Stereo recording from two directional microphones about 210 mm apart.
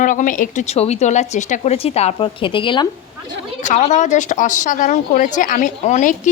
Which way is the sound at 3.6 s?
35° left (ahead or behind).